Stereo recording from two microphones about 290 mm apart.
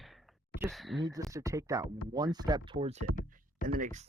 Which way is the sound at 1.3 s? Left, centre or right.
Centre.